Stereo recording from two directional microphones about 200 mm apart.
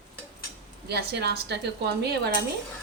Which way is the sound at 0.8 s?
55° right (ahead or behind).